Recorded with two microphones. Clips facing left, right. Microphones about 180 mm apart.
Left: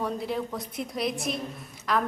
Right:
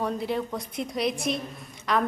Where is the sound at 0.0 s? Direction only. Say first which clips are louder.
Right 2 dB; centre (ahead or behind).